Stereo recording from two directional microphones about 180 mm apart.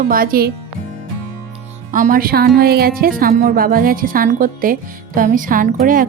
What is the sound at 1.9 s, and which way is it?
A woman's voice, 50° right (ahead or behind).